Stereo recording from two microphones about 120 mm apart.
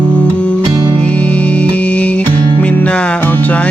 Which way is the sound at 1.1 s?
10° left (ahead or behind).